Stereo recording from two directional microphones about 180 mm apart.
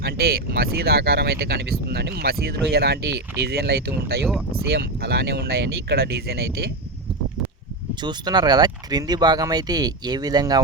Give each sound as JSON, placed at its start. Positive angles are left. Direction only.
{"t": 0.0, "sound": "speech", "side_deg": -60}
{"t": 8.0, "sound": "speech", "side_deg": -25}